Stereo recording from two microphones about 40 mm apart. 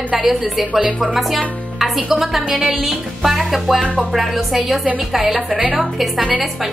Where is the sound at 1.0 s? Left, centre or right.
Centre.